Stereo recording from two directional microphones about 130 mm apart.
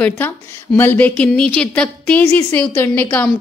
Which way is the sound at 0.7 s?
15° left (ahead or behind).